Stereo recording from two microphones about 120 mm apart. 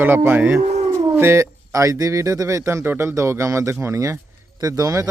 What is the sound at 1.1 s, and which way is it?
A man's voice, 20° right (ahead or behind).